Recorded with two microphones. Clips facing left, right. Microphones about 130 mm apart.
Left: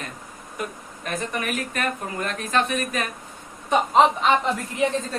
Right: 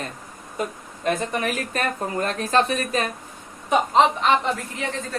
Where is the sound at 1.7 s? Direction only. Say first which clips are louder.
Right 3 dB; 35° right (ahead or behind).